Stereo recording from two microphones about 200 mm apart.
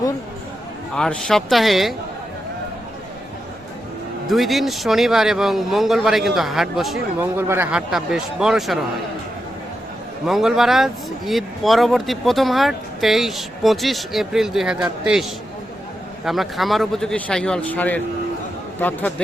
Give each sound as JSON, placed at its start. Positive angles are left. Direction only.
{"t": 0.9, "sound": "speech", "side_deg": 5}
{"t": 4.3, "sound": "speech", "side_deg": 0}
{"t": 10.2, "sound": "speech", "side_deg": 0}